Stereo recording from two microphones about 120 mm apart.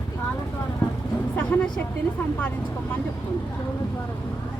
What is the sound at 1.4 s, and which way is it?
Speech, 10° left (ahead or behind).